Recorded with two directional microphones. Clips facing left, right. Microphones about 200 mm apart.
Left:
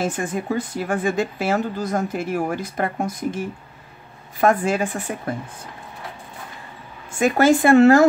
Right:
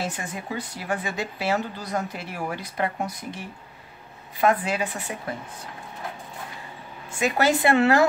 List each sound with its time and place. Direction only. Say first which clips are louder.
0.0 s speech: left 7 dB; 50° left (ahead or behind)
7.1 s speech: left 6 dB; 50° left (ahead or behind)